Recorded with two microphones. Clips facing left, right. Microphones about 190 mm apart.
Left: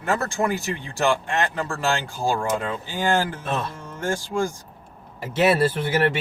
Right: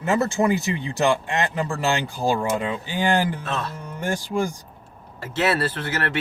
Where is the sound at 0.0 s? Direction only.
15° right (ahead or behind).